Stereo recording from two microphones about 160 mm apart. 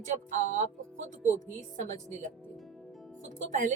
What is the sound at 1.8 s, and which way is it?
Speech, 50° right (ahead or behind).